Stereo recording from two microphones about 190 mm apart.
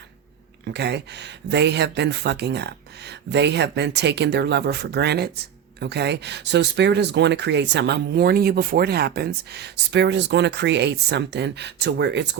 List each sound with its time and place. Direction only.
0.6 s speech: 60° right (ahead or behind)